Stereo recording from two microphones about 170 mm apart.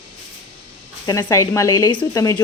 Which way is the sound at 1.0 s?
20° left (ahead or behind).